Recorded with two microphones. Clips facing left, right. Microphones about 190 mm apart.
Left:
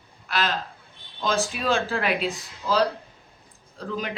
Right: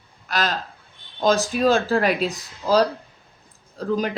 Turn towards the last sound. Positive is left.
turn(degrees=-40)  # may be behind; listen again after turning